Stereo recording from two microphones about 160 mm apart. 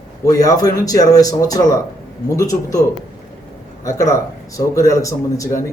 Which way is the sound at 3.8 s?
20° left (ahead or behind).